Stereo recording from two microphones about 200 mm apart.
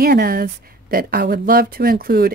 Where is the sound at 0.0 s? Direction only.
50° right (ahead or behind).